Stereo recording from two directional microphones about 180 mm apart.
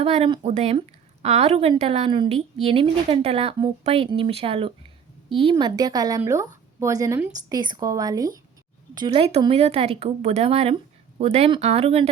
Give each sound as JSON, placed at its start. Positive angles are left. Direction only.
{"t": 0.0, "sound": "a woman's voice", "side_deg": -35}
{"t": 9.0, "sound": "a woman's voice", "side_deg": -30}